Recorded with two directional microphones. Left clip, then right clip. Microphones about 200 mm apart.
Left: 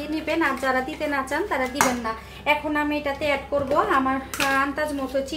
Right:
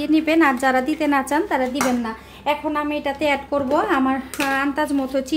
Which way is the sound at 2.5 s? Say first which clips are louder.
Right 1 dB; 40° right (ahead or behind).